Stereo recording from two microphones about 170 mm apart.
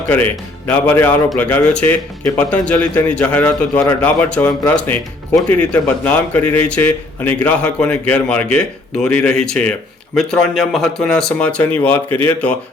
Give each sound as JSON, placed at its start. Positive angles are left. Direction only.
{"t": 0.7, "sound": "speech", "side_deg": 10}